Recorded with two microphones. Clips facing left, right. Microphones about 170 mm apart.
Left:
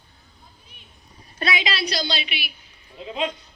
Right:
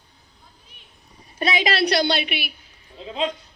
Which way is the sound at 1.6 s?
60° right (ahead or behind).